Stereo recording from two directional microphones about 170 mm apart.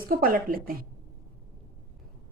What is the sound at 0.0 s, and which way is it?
Speech, 60° right (ahead or behind).